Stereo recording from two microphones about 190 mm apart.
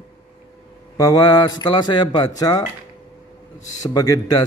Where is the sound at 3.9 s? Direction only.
20° left (ahead or behind).